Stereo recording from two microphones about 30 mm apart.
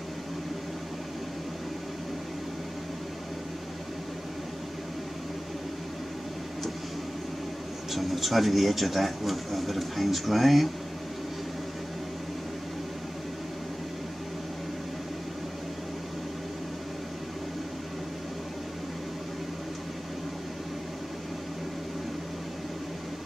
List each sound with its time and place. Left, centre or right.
7.9 s speech: centre